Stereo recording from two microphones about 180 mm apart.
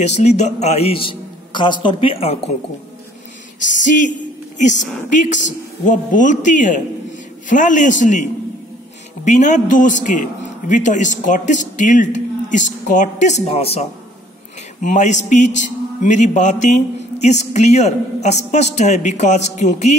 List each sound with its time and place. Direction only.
0.0 s a man's voice: 40° left (ahead or behind)
3.8 s a man's voice: 45° left (ahead or behind)
5.1 s a man's voice: 45° left (ahead or behind)